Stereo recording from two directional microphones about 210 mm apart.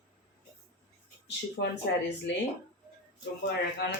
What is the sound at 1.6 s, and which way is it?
Speech, 55° left (ahead or behind).